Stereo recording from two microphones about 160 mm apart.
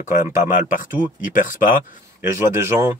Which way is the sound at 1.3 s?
55° left (ahead or behind).